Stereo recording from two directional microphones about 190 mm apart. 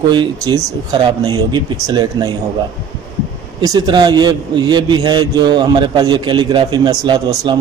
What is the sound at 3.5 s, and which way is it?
A man's voice, 20° right (ahead or behind).